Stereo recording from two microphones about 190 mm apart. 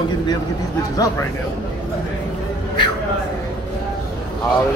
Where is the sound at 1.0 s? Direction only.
20° left (ahead or behind).